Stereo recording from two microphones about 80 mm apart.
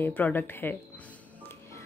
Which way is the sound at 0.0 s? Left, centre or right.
Left.